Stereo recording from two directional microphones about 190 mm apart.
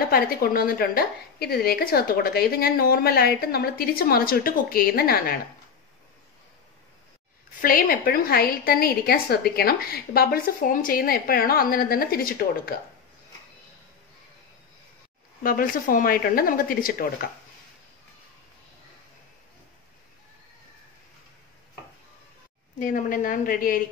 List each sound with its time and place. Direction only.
0.1 s a woman's voice: 50° left (ahead or behind)
7.6 s a woman's voice: 50° left (ahead or behind)
15.4 s a woman's voice: 45° left (ahead or behind)
22.8 s a woman's voice: 45° left (ahead or behind)